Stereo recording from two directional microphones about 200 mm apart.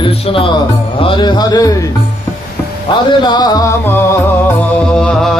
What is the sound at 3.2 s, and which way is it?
Speech, 20° left (ahead or behind).